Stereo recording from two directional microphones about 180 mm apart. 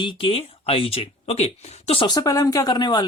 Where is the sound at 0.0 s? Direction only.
30° left (ahead or behind).